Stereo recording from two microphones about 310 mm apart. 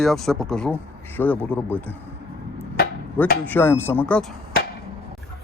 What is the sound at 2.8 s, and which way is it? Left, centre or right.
Chopping, left.